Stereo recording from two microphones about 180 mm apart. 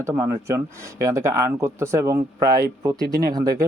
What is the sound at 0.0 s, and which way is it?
Speech, 15° right (ahead or behind).